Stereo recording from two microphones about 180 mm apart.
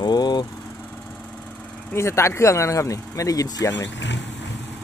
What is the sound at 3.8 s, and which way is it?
Speech, 80° left.